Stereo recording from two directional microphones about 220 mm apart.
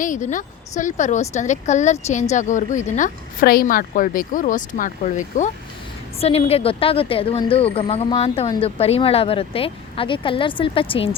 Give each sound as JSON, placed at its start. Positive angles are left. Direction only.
{"t": 0.0, "sound": "speech", "side_deg": 35}